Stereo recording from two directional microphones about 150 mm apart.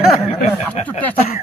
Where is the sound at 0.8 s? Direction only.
50° left (ahead or behind).